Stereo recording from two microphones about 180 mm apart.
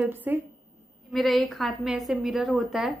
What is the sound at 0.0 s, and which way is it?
Speech, 10° right (ahead or behind).